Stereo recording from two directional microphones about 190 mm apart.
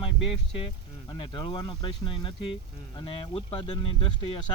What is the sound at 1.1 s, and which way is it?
Speech, 25° left (ahead or behind).